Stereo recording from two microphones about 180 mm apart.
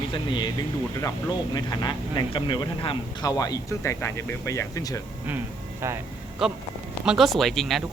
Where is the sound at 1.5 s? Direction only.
25° left (ahead or behind).